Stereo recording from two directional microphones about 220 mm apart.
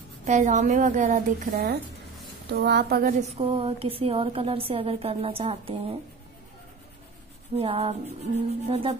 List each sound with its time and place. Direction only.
0.3 s a woman's voice: 35° right (ahead or behind)
7.5 s a woman's voice: 25° right (ahead or behind)